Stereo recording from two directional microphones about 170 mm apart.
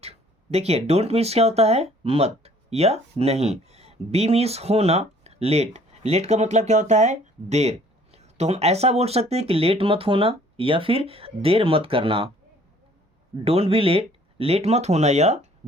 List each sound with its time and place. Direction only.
0.0 s speech: 40° right (ahead or behind)
13.4 s speech: 35° right (ahead or behind)